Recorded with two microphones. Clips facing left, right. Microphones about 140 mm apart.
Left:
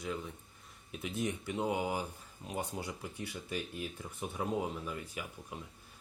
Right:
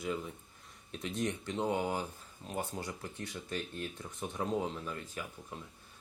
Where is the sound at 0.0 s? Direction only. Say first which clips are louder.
Right 2 dB; centre (ahead or behind).